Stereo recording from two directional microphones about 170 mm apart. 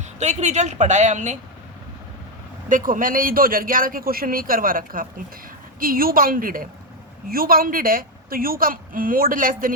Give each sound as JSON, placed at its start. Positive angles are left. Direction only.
{"t": 0.2, "sound": "a woman's voice", "side_deg": -40}
{"t": 2.6, "sound": "a woman's voice", "side_deg": -50}